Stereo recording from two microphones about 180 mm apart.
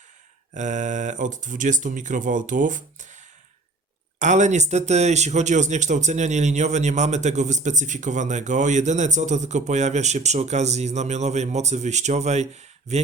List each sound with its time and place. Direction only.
0.5 s speech: 40° right (ahead or behind)